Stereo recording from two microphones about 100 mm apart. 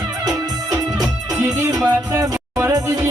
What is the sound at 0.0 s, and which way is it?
Music, 40° right (ahead or behind).